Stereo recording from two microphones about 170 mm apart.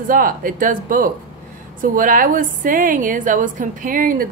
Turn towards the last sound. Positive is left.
turn(degrees=-55)  # may be behind; listen again after turning